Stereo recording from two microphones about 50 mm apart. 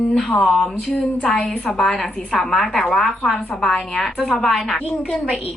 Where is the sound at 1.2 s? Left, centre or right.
Centre.